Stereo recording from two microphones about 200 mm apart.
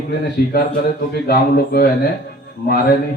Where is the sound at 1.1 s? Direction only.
50° left (ahead or behind).